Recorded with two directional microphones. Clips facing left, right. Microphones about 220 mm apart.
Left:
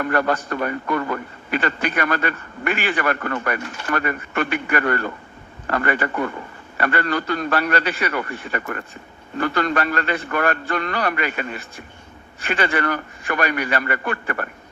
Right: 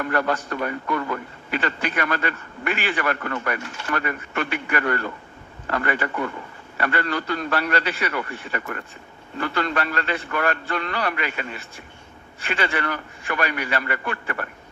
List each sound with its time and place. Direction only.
0.0 s a man's voice: 50° left (ahead or behind)